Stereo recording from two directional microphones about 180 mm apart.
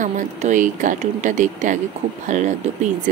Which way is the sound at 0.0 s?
45° right (ahead or behind).